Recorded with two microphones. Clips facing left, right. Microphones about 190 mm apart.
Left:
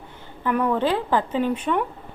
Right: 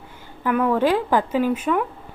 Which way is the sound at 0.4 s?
5° right (ahead or behind).